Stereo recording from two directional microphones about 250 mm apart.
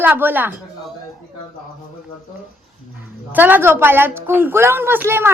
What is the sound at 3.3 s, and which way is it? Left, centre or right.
A woman's voice, centre.